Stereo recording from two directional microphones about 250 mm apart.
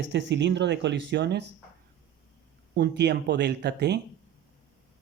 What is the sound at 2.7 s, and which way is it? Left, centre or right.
Speech, right.